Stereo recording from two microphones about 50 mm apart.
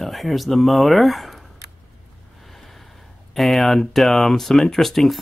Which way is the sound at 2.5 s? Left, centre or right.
Centre.